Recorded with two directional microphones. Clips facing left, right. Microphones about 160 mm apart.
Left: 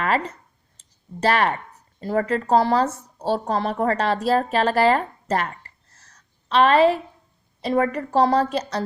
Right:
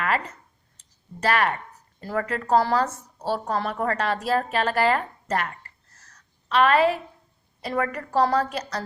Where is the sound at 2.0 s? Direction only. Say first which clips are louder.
Left 5 dB; 25° left (ahead or behind).